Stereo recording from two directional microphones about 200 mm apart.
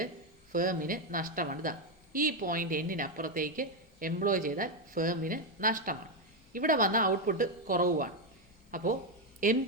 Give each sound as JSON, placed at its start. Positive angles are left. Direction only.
{"t": 0.5, "sound": "a woman's voice", "side_deg": -45}